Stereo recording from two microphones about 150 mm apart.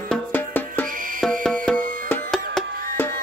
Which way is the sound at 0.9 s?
65° right (ahead or behind).